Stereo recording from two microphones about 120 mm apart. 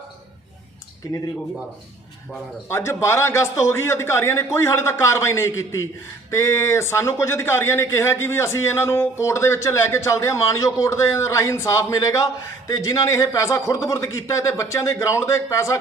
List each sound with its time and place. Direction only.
2.6 s a man's voice: 20° left (ahead or behind)